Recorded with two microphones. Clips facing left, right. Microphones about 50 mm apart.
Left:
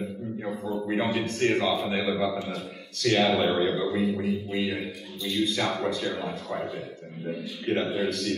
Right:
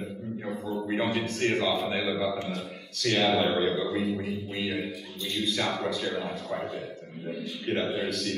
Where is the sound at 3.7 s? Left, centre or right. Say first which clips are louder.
Left 2 dB; left.